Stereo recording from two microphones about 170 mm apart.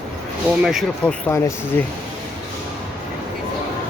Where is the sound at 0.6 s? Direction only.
Centre (ahead or behind).